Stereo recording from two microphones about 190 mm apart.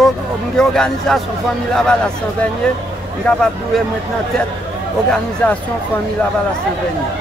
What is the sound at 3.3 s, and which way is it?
Speech, 5° left (ahead or behind).